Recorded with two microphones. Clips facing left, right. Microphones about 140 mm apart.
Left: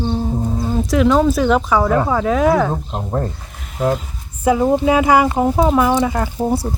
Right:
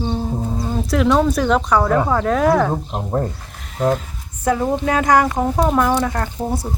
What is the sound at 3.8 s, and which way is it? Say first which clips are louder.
Speech: even; centre (ahead or behind).